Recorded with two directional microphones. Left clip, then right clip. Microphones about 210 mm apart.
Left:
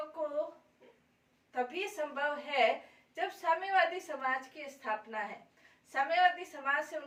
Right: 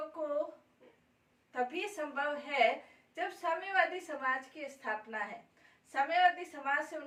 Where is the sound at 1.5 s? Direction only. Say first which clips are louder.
Even; centre (ahead or behind).